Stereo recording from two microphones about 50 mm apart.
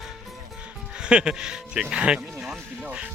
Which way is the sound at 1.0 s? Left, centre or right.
Centre.